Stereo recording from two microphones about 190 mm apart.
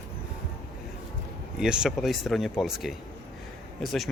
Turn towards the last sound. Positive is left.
turn(degrees=0)  # may be behind; listen again after turning